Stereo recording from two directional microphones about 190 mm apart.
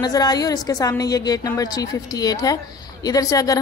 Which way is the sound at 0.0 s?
20° left (ahead or behind).